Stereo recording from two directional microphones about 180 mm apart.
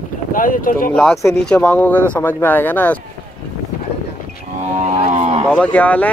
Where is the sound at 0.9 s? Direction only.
5° left (ahead or behind).